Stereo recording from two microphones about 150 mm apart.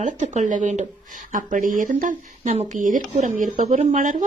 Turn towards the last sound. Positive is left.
turn(degrees=-60)  # may be behind; listen again after turning